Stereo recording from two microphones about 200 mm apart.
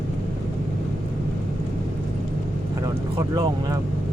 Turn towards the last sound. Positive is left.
turn(degrees=-20)  # may be behind; listen again after turning